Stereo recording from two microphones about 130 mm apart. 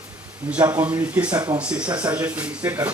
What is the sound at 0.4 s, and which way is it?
Speech, 10° right (ahead or behind).